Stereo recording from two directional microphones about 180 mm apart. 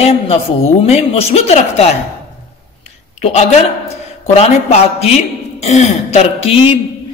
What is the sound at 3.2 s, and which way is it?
A man's voice, 35° left (ahead or behind).